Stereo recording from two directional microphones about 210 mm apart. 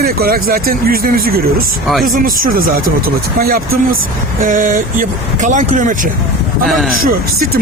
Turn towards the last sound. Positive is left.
turn(degrees=-45)  # may be behind; listen again after turning